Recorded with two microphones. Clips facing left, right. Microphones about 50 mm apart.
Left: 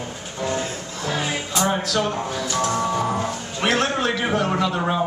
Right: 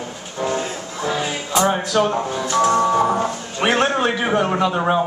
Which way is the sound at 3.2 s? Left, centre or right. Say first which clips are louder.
Right 3 dB; right.